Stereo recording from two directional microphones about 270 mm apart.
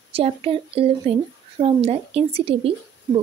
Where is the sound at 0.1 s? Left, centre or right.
Right.